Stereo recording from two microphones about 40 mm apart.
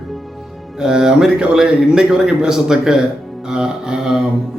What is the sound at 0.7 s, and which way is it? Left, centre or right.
A man's voice, centre.